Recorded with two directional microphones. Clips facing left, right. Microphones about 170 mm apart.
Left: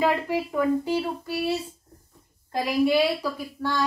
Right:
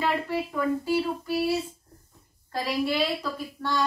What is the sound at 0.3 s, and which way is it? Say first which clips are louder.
Speech: left 3 dB; 15° left (ahead or behind).